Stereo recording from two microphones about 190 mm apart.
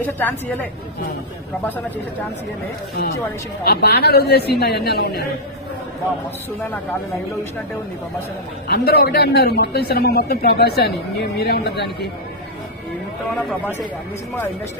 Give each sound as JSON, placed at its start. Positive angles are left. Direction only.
{"t": 0.0, "sound": "a woman's voice", "side_deg": 10}
{"t": 3.6, "sound": "speech", "side_deg": 55}
{"t": 8.6, "sound": "speech", "side_deg": 55}